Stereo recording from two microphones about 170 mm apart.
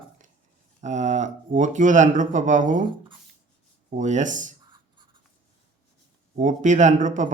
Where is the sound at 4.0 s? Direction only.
45° right (ahead or behind).